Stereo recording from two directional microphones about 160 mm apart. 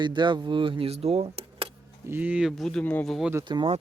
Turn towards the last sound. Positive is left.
turn(degrees=-30)  # may be behind; listen again after turning